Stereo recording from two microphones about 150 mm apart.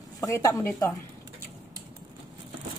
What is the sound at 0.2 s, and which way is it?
Speech, 20° left (ahead or behind).